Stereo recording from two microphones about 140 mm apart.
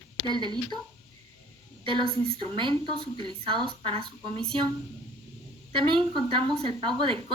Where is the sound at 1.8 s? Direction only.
40° right (ahead or behind).